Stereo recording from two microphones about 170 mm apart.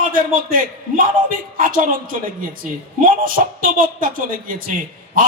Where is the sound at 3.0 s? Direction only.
55° right (ahead or behind).